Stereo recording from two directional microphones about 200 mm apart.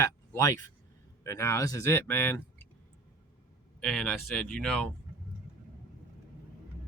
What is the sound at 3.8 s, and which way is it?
Speech, 5° left (ahead or behind).